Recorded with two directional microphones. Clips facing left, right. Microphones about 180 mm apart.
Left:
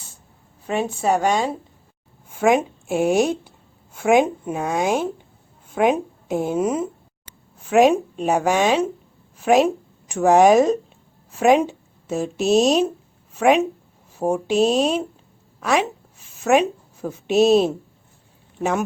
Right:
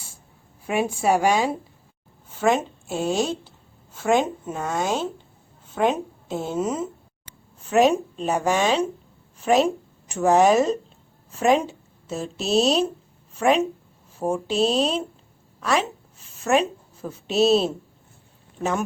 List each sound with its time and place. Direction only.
0.7 s speech: 10° right (ahead or behind)
2.4 s a woman's voice: 10° left (ahead or behind)